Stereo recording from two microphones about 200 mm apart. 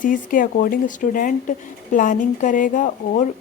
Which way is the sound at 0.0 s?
45° left (ahead or behind).